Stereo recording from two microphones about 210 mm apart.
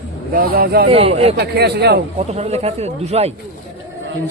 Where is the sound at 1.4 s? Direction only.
50° right (ahead or behind).